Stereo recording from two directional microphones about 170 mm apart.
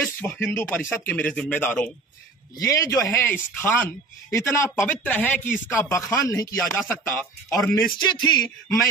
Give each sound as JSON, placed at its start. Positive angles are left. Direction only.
{"t": 0.0, "sound": "a man's voice", "side_deg": 10}